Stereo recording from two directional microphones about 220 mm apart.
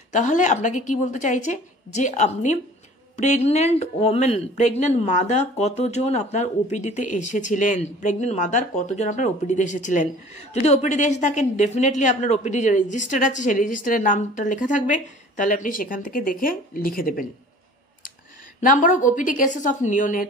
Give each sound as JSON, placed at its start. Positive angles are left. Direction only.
{"t": 0.1, "sound": "speech", "side_deg": 35}
{"t": 18.6, "sound": "speech", "side_deg": 35}